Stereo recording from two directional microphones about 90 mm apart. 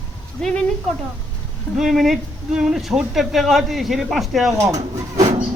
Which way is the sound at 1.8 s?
Centre (ahead or behind).